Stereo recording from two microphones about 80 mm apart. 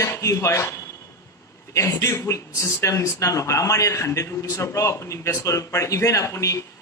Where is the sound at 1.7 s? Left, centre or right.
Left.